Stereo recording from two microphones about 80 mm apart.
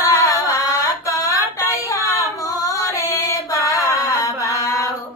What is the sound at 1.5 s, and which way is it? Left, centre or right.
Female singing, left.